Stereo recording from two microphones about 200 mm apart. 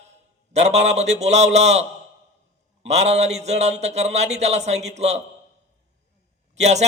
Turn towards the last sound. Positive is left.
turn(degrees=-35)  # may be behind; listen again after turning